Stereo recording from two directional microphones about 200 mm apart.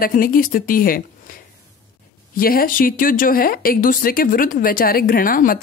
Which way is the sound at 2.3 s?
45° left (ahead or behind).